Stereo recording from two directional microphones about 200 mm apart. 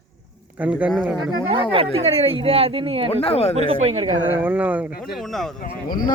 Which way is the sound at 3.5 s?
30° right (ahead or behind).